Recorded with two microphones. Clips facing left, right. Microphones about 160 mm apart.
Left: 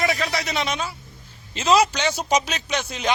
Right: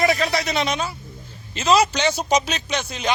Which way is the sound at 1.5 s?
20° left (ahead or behind).